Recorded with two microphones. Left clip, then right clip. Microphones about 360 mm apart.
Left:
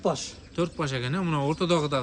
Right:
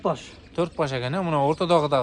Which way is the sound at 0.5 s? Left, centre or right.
Centre.